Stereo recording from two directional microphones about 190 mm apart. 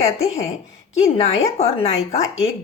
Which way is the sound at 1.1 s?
30° left (ahead or behind).